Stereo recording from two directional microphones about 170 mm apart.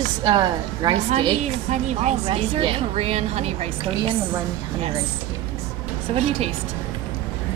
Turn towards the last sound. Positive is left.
turn(degrees=-35)  # may be behind; listen again after turning